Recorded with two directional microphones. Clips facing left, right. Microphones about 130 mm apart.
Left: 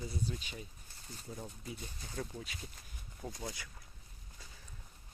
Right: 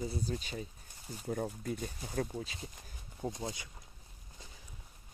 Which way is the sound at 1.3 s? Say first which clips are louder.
Right 10 dB; 55° right (ahead or behind).